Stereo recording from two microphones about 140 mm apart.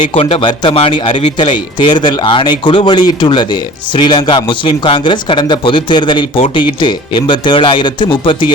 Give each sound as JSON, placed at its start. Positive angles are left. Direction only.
{"t": 0.0, "sound": "a man's voice", "side_deg": 40}